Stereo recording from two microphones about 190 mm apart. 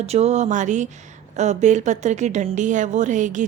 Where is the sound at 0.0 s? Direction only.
35° right (ahead or behind).